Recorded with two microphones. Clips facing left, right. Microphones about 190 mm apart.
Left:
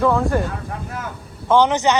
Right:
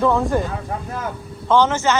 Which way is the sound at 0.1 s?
15° right (ahead or behind).